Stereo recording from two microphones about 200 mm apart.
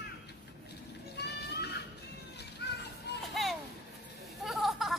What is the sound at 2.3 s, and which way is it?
Children playing, 55° left (ahead or behind).